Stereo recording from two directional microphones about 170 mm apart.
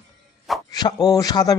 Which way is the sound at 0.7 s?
25° left (ahead or behind).